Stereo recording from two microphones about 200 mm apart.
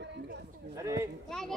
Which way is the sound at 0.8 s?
15° right (ahead or behind).